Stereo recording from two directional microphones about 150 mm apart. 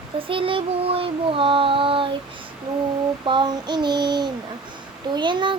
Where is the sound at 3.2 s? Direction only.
30° right (ahead or behind).